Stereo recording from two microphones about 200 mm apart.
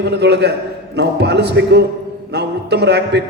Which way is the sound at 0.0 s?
55° right (ahead or behind).